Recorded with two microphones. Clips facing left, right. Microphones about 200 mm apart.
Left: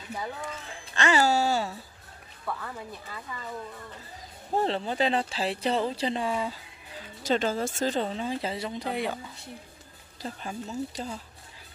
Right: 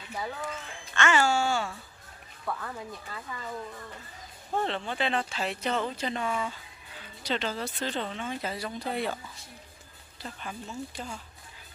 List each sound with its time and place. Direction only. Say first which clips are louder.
0.1 s speech: even; 5° right (ahead or behind)
0.9 s speech: left 2 dB; 35° left (ahead or behind)
2.4 s speech: even; centre (ahead or behind)
4.5 s speech: left 3 dB; 35° left (ahead or behind)
7.2 s speech: left 5 dB; 45° left (ahead or behind); by 9.2 s 15° left (ahead or behind)
10.2 s speech: left 4 dB; 35° left (ahead or behind)